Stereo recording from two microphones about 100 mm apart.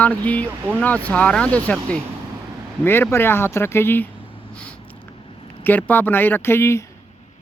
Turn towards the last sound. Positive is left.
turn(degrees=25)  # may be behind; listen again after turning